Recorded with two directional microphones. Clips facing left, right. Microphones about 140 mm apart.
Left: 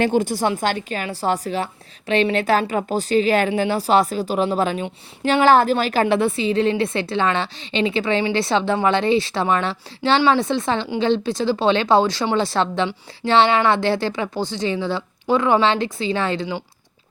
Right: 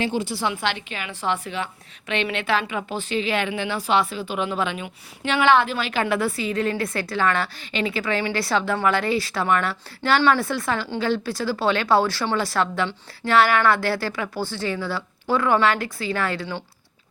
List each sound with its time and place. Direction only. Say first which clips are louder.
0.0 s a woman's voice: left 6 dB; 50° left (ahead or behind)
6.1 s speech: left 5 dB; 25° left (ahead or behind)